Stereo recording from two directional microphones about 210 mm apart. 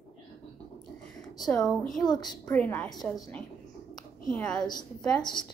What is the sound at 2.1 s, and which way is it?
Speech, 20° left (ahead or behind).